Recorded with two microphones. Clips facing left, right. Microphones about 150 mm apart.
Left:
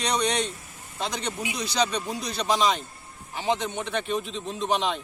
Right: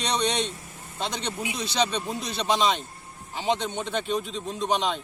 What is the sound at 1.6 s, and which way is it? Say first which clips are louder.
Speech: even; 25° right (ahead or behind).